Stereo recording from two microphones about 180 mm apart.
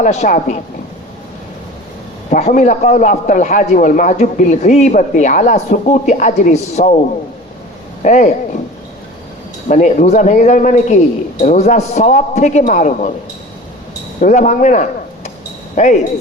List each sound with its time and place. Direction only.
0.0 s a man's voice: 40° left (ahead or behind)
2.3 s a man's voice: 40° left (ahead or behind)
8.0 s a man's voice: 40° left (ahead or behind)
9.6 s a man's voice: 45° left (ahead or behind)
14.2 s speech: 45° left (ahead or behind)